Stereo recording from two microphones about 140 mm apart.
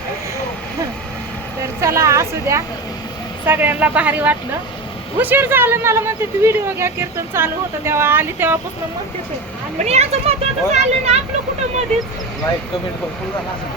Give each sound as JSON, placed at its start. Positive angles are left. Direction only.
{"t": 1.8, "sound": "a woman's voice", "side_deg": -20}
{"t": 9.7, "sound": "speech", "side_deg": -50}